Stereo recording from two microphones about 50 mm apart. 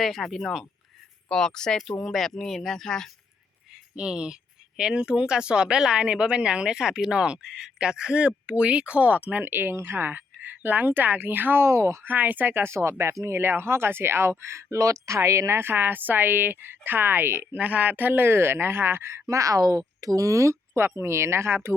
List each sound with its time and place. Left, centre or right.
0.0 s speech: centre
1.3 s speech: centre
1.8 s speech: centre
3.9 s speech: centre
9.4 s speech: right
11.6 s speech: right
12.0 s speech: right
12.6 s speech: right
15.6 s speech: right
17.5 s speech: right
20.1 s speech: right